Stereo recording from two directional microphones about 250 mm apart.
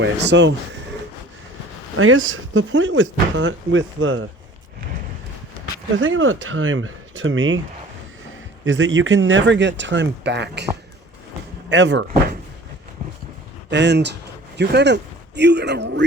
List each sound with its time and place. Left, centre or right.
0.0 s speech: right
2.0 s speech: right
6.0 s speech: right
8.6 s speech: right
11.7 s speech: right
13.7 s speech: right